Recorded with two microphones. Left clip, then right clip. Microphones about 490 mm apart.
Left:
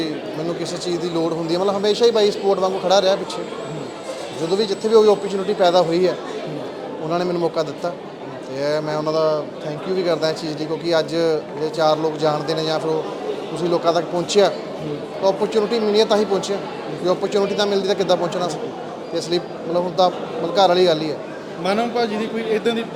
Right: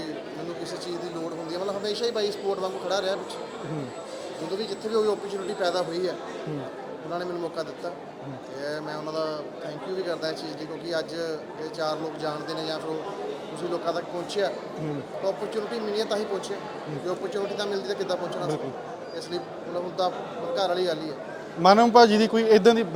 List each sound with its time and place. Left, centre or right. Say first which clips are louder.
0.9 s speech: left 15 dB; left
4.5 s speech: left 12 dB; left
13.8 s speech: left 10 dB; left
21.6 s a man's voice: right 5 dB; right